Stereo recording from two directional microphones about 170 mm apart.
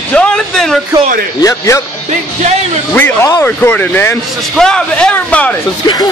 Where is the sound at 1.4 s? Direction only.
20° left (ahead or behind).